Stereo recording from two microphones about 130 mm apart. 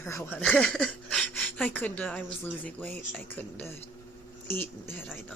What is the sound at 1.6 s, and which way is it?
Speech, 15° left (ahead or behind).